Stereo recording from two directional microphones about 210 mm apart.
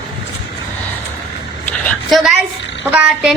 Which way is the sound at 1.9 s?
Centre (ahead or behind).